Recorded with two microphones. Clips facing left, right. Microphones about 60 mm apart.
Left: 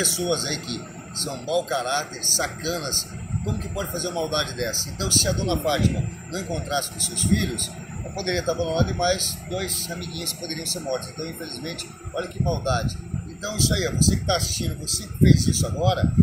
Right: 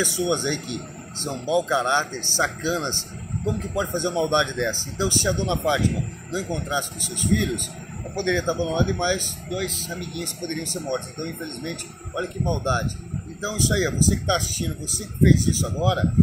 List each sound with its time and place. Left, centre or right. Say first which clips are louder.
0.0 s speech: right 2 dB; centre
0.3 s speech: right 2 dB; centre
9.5 s speech: right 1 dB; centre
9.9 s speech: right 2 dB; centre